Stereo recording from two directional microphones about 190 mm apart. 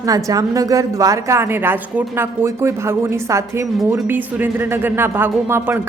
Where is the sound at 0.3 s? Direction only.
20° right (ahead or behind).